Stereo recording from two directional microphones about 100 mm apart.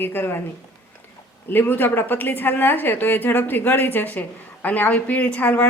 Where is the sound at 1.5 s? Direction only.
20° left (ahead or behind).